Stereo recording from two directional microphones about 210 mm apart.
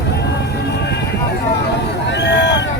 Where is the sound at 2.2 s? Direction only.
55° left (ahead or behind).